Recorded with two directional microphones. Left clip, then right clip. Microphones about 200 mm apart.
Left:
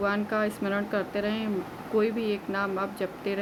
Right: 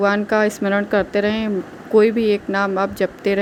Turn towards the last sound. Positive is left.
turn(degrees=-35)  # may be behind; listen again after turning